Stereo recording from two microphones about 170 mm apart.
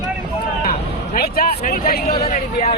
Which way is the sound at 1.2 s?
60° left (ahead or behind).